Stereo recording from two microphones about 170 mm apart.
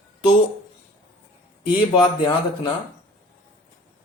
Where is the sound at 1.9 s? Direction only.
25° left (ahead or behind).